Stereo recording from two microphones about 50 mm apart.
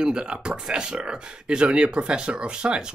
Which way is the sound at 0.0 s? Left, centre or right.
Centre.